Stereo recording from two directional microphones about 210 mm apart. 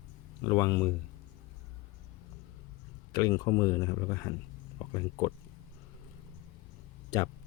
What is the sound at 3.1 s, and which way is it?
Speech, 15° left (ahead or behind).